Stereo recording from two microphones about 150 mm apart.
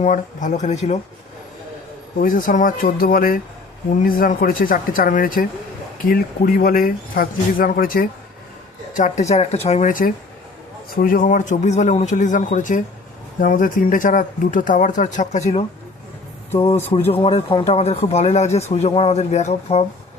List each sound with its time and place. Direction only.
0.0 s speech: 55° left (ahead or behind)
2.1 s speech: 65° left (ahead or behind)
8.9 s speech: 55° left (ahead or behind)
10.9 s speech: 70° left (ahead or behind); by 15.6 s 50° left (ahead or behind)
17.1 s speech: 40° left (ahead or behind)